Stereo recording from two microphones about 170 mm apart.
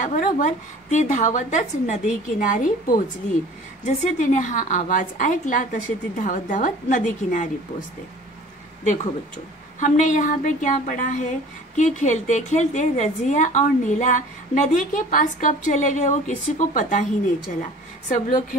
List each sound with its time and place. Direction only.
0.0 s a woman's voice: 50° left (ahead or behind)
8.8 s a woman's voice: 45° left (ahead or behind)
18.0 s a woman's voice: 50° left (ahead or behind)